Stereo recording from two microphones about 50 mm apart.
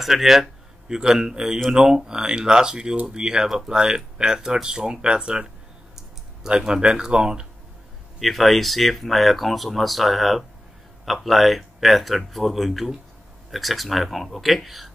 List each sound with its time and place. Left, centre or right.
0.0 s speech: centre
6.5 s speech: centre
8.2 s speech: centre